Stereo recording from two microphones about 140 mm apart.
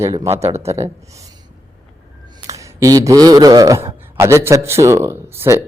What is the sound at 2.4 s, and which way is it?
A man's voice, 25° right (ahead or behind).